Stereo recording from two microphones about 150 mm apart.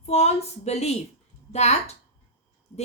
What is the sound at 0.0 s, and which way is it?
Speech, 45° left (ahead or behind).